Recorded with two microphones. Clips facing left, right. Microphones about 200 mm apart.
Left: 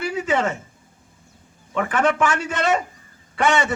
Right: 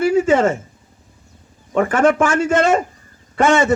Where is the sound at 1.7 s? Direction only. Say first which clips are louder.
Right 6 dB; 45° right (ahead or behind).